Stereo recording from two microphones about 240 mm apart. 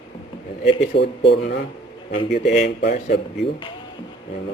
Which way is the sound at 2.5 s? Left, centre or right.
Left.